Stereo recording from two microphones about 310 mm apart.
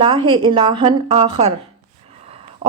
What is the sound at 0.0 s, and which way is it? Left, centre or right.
A woman's voice, centre.